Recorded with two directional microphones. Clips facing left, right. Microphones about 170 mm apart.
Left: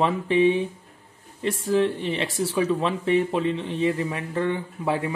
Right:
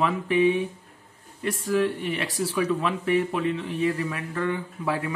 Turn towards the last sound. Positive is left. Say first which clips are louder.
# left 2 dB
turn(degrees=25)  # may be behind; listen again after turning